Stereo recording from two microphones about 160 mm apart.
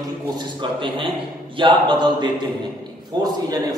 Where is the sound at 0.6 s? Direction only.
30° right (ahead or behind).